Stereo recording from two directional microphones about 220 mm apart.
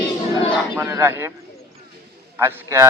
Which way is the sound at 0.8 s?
10° right (ahead or behind).